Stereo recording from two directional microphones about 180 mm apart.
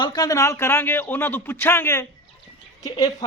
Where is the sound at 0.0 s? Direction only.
20° left (ahead or behind).